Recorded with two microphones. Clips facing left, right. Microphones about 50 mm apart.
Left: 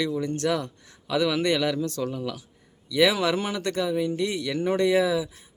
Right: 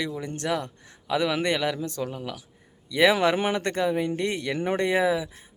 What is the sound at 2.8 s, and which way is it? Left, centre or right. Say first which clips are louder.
Speech: right 1 dB; right.